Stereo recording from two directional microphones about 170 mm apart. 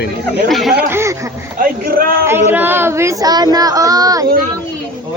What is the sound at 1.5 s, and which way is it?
Speech, 60° right (ahead or behind).